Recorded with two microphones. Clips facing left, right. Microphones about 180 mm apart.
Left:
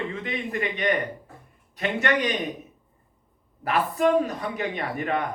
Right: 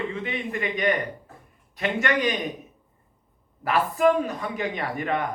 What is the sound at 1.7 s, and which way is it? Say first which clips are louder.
Speech: even; 40° left (ahead or behind).